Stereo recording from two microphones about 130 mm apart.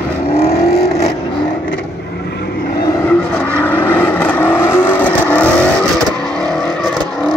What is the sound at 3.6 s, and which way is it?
Vehicle, 15° left (ahead or behind).